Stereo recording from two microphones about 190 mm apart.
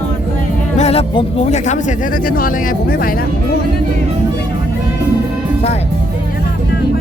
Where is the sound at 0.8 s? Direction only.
30° left (ahead or behind); by 3.2 s 50° left (ahead or behind).